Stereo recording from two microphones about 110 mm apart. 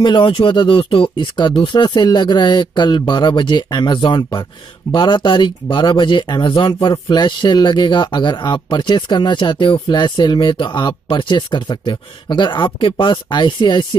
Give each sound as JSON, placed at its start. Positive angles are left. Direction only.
{"t": 0.0, "sound": "speech", "side_deg": 45}